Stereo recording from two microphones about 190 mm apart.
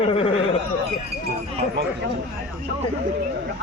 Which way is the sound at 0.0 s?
30° left (ahead or behind).